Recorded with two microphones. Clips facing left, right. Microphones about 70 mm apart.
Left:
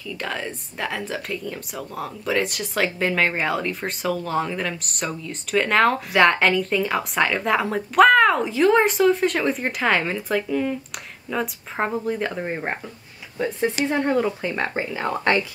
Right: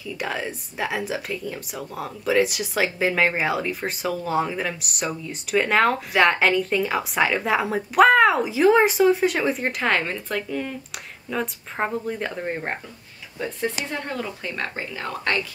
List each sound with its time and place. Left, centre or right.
0.0 s speech: centre
13.8 s speech: left